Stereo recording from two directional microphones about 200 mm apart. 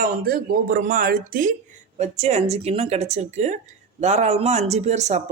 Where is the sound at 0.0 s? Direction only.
50° right (ahead or behind).